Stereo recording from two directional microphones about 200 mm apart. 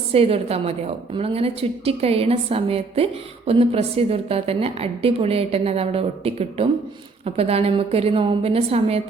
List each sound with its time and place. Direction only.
0.1 s a woman's voice: 30° right (ahead or behind)